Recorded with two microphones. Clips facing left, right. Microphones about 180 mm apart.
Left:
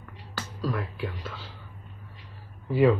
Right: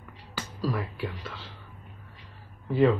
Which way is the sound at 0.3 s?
5° right (ahead or behind).